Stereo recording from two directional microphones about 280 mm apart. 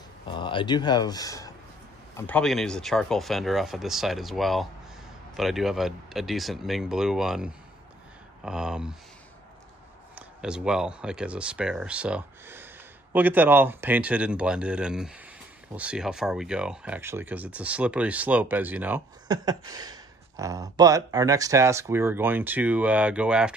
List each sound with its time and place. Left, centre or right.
0.3 s speech: centre
10.1 s speech: centre